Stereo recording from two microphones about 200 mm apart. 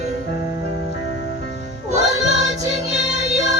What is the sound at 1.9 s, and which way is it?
Music, 35° right (ahead or behind).